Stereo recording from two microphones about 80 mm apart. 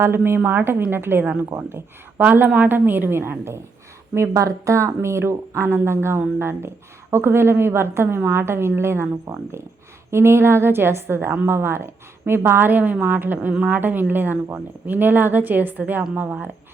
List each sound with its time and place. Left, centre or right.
0.2 s a woman's voice: right